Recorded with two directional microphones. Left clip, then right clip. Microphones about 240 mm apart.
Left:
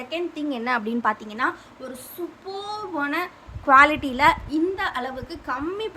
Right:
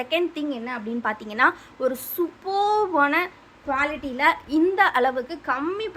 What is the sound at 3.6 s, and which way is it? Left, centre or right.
Speech, centre.